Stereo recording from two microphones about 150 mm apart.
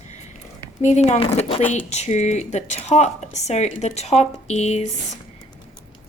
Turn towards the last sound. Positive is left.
turn(degrees=50)  # may be behind; listen again after turning